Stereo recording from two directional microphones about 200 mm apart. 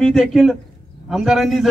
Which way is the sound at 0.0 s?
Centre (ahead or behind).